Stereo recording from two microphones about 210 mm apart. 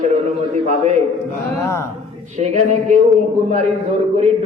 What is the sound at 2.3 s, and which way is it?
Speech, 35° right (ahead or behind).